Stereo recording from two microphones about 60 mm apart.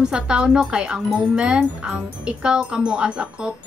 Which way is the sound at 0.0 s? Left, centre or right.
Centre.